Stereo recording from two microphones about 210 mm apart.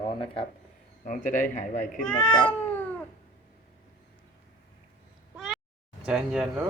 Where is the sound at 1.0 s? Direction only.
40° left (ahead or behind).